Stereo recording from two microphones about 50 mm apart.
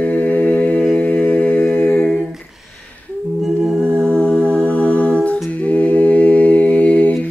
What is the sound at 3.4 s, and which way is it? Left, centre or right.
A capella, centre.